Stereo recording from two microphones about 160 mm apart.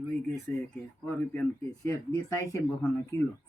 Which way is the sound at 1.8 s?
20° left (ahead or behind).